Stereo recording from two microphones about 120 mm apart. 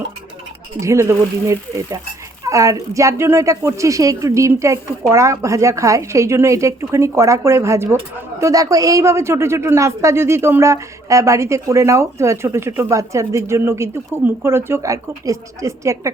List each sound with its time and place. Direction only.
0.8 s speech: 25° right (ahead or behind)